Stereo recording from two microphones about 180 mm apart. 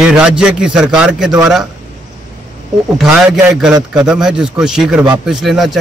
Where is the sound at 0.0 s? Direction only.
5° right (ahead or behind).